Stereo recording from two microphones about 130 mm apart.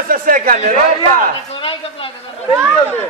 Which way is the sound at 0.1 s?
90° right.